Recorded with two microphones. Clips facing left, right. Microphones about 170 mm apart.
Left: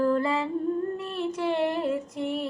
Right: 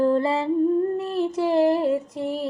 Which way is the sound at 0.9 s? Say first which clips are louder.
Right 6 dB; 35° right (ahead or behind).